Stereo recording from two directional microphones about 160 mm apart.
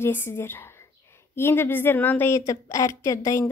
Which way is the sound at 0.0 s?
15° left (ahead or behind).